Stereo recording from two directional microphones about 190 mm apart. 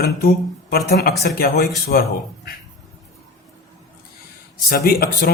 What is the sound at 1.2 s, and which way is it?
Speech, 55° left (ahead or behind).